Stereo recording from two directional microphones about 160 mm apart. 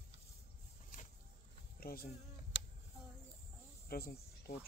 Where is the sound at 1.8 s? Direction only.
70° left (ahead or behind).